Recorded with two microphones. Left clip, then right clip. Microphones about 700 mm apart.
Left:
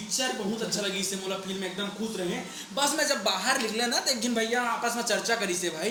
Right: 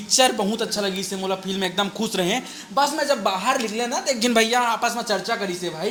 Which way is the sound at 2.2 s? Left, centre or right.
Right.